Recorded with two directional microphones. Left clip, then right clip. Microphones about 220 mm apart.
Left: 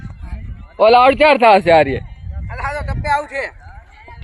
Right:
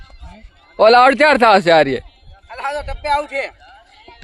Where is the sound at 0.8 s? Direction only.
30° right (ahead or behind).